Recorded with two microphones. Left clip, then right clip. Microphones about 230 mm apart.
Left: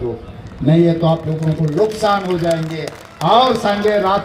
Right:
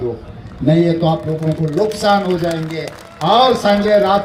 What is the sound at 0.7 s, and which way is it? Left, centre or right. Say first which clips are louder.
Speech: even; right.